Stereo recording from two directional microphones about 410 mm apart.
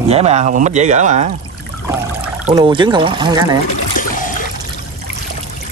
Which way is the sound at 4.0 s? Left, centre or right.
Centre.